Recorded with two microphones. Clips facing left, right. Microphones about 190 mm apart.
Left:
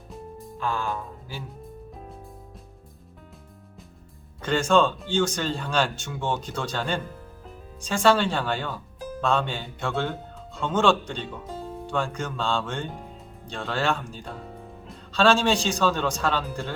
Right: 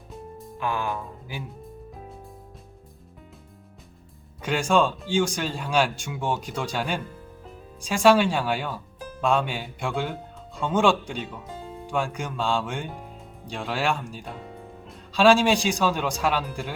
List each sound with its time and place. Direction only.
0.1 s music: centre (ahead or behind)
0.6 s speech: 15° right (ahead or behind)
4.4 s speech: 10° right (ahead or behind)